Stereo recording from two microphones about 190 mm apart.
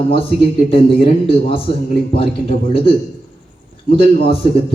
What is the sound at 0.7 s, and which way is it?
A man's voice, 30° left (ahead or behind).